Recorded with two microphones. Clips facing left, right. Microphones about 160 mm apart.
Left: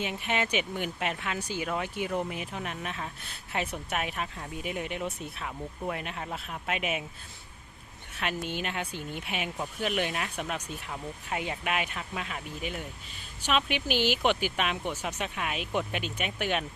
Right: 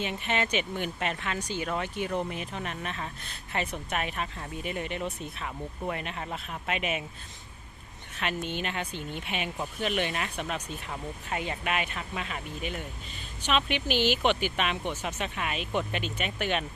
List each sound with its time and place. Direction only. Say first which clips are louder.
0.0 s speech: right 1 dB; 10° left (ahead or behind)
8.1 s speech: right 1 dB; 10° left (ahead or behind)